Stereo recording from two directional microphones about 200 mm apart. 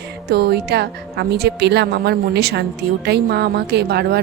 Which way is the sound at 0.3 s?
55° right (ahead or behind).